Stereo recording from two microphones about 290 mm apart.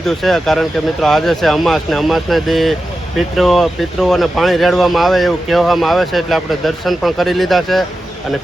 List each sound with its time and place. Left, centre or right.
0.0 s speech: centre